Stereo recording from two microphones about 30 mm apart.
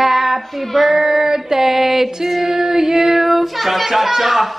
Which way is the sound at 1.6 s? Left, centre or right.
Centre.